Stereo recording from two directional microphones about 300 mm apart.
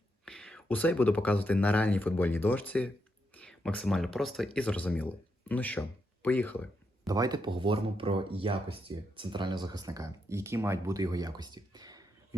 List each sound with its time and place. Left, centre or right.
0.3 s speech: centre
7.1 s speech: centre